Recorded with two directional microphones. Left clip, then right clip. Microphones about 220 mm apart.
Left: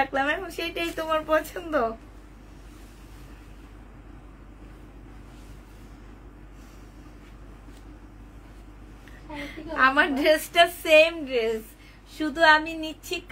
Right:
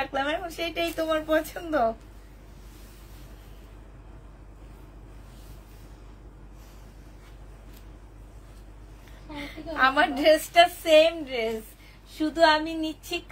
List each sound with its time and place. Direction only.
0.1 s a woman's voice: 30° left (ahead or behind)
9.4 s a woman's voice: 25° left (ahead or behind)